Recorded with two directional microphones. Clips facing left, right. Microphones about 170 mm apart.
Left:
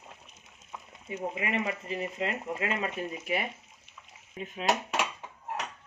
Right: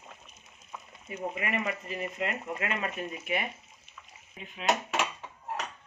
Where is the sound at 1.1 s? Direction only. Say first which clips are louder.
Left 1 dB; 25° left (ahead or behind).